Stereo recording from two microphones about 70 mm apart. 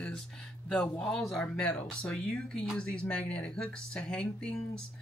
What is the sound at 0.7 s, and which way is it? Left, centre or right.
Speech, centre.